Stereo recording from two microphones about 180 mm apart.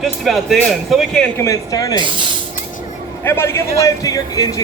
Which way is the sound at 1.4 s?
20° left (ahead or behind).